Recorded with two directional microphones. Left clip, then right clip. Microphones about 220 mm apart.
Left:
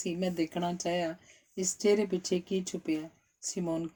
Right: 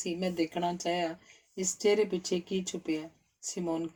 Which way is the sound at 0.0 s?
45° left (ahead or behind).